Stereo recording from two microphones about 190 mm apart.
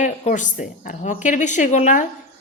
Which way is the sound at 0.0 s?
40° left (ahead or behind).